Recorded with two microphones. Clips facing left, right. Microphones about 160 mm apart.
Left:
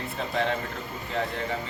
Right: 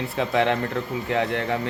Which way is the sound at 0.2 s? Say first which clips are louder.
Right 6 dB; 75° right (ahead or behind).